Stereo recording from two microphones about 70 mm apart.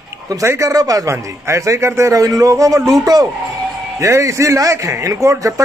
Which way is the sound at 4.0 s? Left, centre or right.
Right.